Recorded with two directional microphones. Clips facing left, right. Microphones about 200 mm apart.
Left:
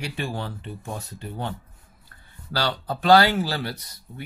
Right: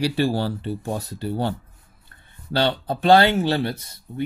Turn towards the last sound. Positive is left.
turn(degrees=-25)  # may be behind; listen again after turning